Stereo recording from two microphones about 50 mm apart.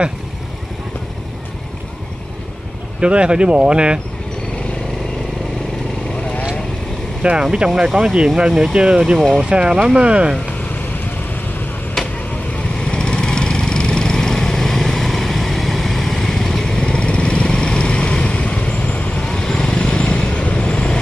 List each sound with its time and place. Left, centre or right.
3.0 s speech: right
7.2 s speech: right
7.8 s speech: centre
8.5 s speech: centre
8.7 s speech: centre
10.6 s vehicle: left
12.5 s lawn mower: centre